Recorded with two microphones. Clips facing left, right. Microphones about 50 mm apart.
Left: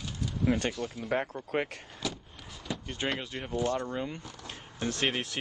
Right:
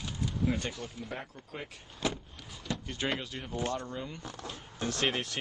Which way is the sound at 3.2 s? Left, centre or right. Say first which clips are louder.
Left 4 dB; left.